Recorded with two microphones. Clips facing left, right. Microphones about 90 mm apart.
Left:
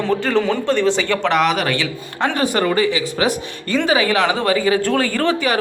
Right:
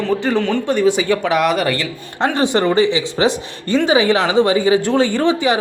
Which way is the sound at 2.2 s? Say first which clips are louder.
Right 2 dB; 25° right (ahead or behind).